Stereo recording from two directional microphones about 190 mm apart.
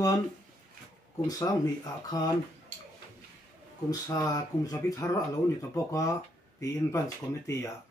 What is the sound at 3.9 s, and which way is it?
Speech, 20° left (ahead or behind).